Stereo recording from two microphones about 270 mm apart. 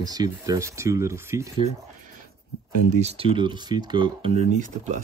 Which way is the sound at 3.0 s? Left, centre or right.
Right.